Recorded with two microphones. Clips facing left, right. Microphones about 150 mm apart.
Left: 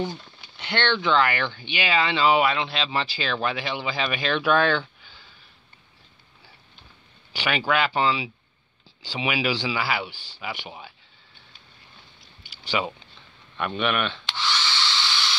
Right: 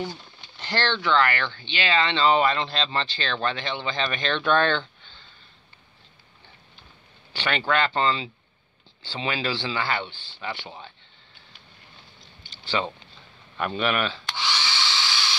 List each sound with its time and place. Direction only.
0.6 s speech: centre (ahead or behind)
1.0 s speech: 15° left (ahead or behind)
7.3 s speech: 10° left (ahead or behind)
12.4 s a sound: 10° left (ahead or behind)
13.6 s speech: centre (ahead or behind)
14.3 s hair dryer: 15° right (ahead or behind)